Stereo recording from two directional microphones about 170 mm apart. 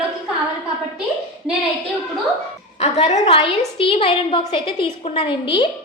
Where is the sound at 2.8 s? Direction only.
40° left (ahead or behind).